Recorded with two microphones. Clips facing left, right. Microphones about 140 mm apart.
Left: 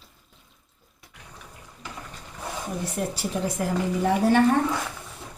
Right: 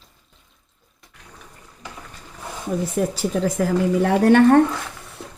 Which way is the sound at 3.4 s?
90° right.